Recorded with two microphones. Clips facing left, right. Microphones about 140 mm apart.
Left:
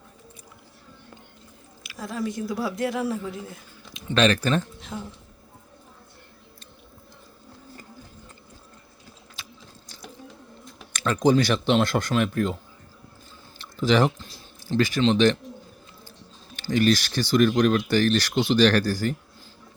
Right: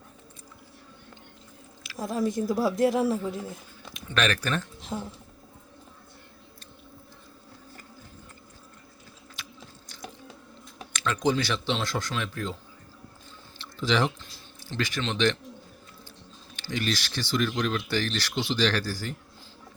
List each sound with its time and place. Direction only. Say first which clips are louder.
2.0 s speech: right 2 dB; 45° right (ahead or behind)
3.1 s a woman's voice: right 2 dB; centre (ahead or behind)
3.9 s speech: left 6 dB; 25° left (ahead or behind)
4.9 s speech: right 1 dB; 15° right (ahead or behind)
9.3 s biting: right 1 dB; 35° left (ahead or behind)
10.9 s speech: left 6 dB; 40° left (ahead or behind)
13.6 s speech: left 5 dB; 45° left (ahead or behind)
16.6 s speech: left 9 dB; 45° left (ahead or behind)